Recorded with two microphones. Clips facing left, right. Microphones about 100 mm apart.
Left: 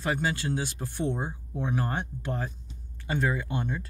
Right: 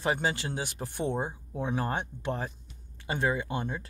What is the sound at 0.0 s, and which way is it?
Speech, 20° right (ahead or behind).